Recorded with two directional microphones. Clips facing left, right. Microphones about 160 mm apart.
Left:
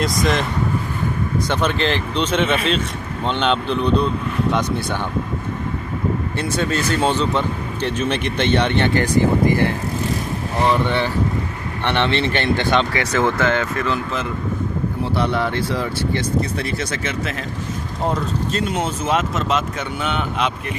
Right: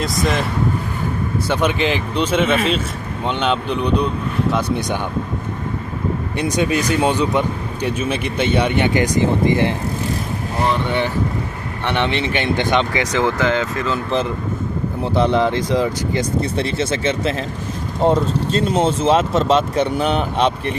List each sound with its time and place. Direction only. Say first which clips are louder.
0.0 s speech: even; centre (ahead or behind)
1.5 s speech: right 3 dB; 10° right (ahead or behind)
6.3 s speech: right 7 dB; 15° right (ahead or behind)
10.8 s speech: even; 15° right (ahead or behind)
13.6 s speech: right 1 dB; 25° right (ahead or behind)